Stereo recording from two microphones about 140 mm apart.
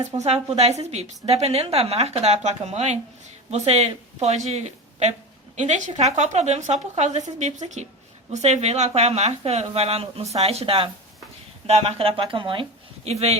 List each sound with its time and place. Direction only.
0.2 s a woman's voice: 50° right (ahead or behind)
13.1 s a woman's voice: 50° right (ahead or behind)